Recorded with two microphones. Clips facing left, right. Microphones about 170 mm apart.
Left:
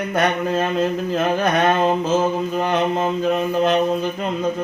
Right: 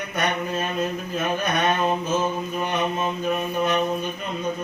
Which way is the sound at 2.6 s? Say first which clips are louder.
Left 5 dB; 75° left (ahead or behind).